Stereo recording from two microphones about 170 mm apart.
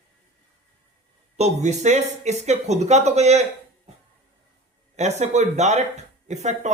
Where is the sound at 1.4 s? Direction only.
45° right (ahead or behind).